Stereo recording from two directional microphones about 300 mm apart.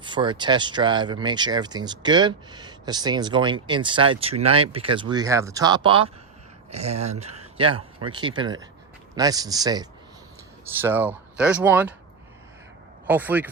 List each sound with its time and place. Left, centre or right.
0.0 s speech: centre
13.1 s speech: centre